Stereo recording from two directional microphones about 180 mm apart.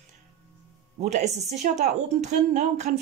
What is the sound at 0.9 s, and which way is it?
A woman's voice, 40° right (ahead or behind).